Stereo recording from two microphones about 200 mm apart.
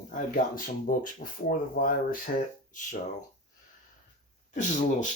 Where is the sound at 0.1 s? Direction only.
45° left (ahead or behind).